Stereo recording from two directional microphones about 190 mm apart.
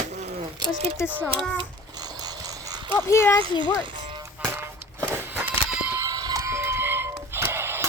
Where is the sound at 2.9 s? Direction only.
10° left (ahead or behind).